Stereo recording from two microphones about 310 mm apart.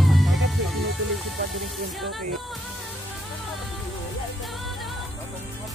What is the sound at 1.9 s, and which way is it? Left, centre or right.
Speech, centre.